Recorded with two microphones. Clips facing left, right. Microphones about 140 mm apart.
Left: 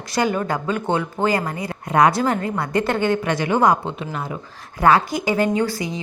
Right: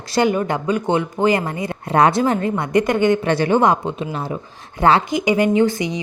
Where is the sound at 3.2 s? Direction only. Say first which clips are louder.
Right 2 dB; 30° right (ahead or behind).